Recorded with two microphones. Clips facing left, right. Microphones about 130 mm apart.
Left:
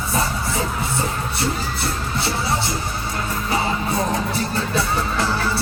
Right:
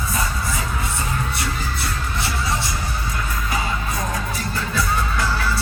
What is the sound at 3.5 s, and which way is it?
Music, 30° left (ahead or behind).